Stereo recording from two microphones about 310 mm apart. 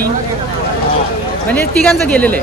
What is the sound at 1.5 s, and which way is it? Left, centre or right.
Speech, centre.